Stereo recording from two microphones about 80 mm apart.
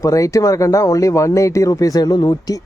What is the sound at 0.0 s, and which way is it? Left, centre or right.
Speech, left.